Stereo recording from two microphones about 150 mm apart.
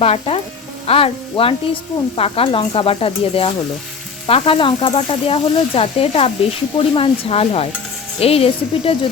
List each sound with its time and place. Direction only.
0.0 s sizzle: 40° left (ahead or behind)